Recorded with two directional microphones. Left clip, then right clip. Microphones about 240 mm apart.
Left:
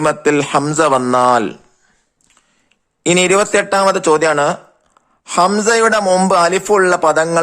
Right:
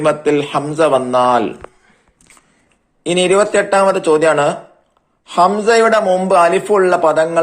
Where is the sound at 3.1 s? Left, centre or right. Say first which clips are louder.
Even; left.